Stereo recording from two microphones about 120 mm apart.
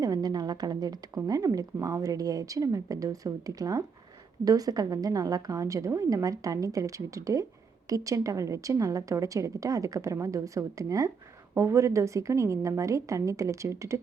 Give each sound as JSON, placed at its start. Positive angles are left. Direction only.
{"t": 0.0, "sound": "speech", "side_deg": -30}